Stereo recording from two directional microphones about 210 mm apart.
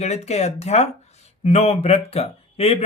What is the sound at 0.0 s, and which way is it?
Speech, 30° left (ahead or behind).